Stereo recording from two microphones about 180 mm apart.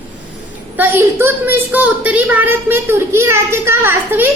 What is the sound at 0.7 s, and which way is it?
A woman's voice, 10° right (ahead or behind).